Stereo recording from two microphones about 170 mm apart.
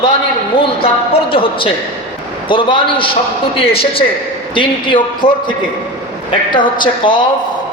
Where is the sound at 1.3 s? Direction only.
30° left (ahead or behind).